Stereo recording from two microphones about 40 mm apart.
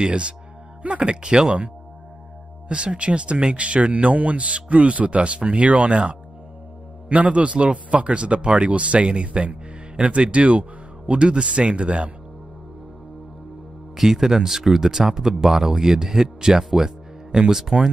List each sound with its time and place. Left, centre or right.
0.0 s speech: right
2.7 s speech: right
13.9 s speech: centre
16.3 s music: centre
17.7 s speech: right